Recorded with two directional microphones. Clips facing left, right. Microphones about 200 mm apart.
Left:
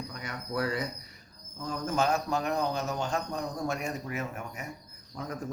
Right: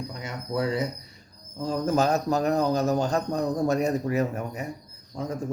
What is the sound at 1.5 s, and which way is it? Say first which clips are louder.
Speech: right 6 dB; 35° right (ahead or behind).